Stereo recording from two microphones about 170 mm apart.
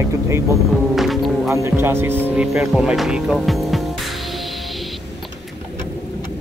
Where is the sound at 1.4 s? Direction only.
15° right (ahead or behind).